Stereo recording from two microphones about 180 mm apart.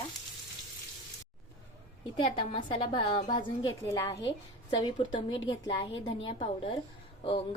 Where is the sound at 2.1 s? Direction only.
30° left (ahead or behind).